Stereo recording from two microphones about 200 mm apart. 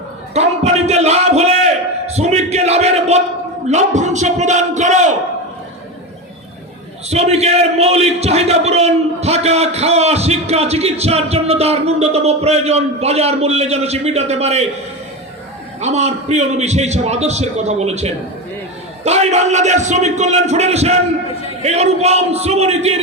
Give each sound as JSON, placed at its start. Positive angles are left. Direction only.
{"t": 0.3, "sound": "a man's voice", "side_deg": -35}
{"t": 7.1, "sound": "a man's voice", "side_deg": -30}
{"t": 15.8, "sound": "a man's voice", "side_deg": -35}